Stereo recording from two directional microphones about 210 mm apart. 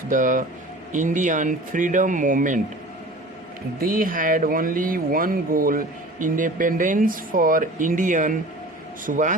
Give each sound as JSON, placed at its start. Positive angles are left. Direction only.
{"t": 0.1, "sound": "speech", "side_deg": -40}
{"t": 3.8, "sound": "speech", "side_deg": -45}